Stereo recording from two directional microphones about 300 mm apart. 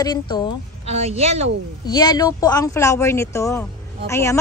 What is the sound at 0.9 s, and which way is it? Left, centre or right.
Speech, right.